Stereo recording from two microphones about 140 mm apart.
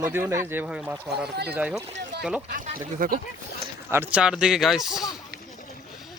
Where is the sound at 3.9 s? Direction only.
10° right (ahead or behind).